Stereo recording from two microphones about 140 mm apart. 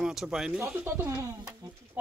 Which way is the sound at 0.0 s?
5° right (ahead or behind).